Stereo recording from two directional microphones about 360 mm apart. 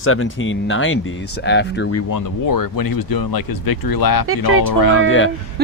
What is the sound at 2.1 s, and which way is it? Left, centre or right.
Speech, left.